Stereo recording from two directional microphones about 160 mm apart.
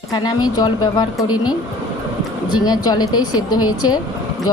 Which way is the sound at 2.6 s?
25° left (ahead or behind).